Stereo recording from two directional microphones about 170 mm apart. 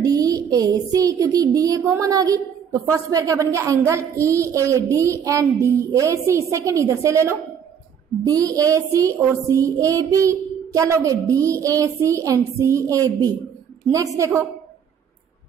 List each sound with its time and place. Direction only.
0.0 s speech: 20° right (ahead or behind)
2.0 s music: 20° right (ahead or behind)
3.8 s a woman's voice: 20° right (ahead or behind)
8.4 s music: 20° right (ahead or behind)
14.1 s a woman's voice: 15° right (ahead or behind)